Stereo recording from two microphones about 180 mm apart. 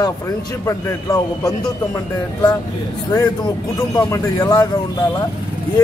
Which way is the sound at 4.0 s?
15° left (ahead or behind).